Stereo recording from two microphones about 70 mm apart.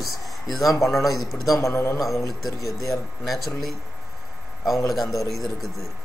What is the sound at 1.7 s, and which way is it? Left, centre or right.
Speech, left.